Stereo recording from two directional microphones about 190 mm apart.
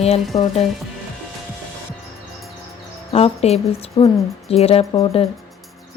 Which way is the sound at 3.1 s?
35° left (ahead or behind).